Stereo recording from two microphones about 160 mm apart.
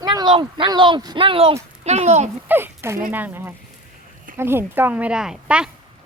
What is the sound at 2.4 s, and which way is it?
Speech, 15° right (ahead or behind).